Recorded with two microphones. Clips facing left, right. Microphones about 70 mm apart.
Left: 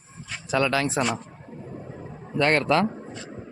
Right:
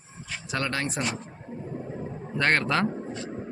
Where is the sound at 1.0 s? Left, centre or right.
Left.